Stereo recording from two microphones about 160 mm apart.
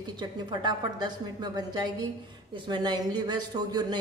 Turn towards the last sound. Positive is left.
turn(degrees=-25)  # may be behind; listen again after turning